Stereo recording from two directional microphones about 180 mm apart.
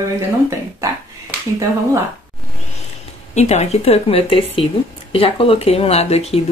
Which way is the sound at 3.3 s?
40° left (ahead or behind).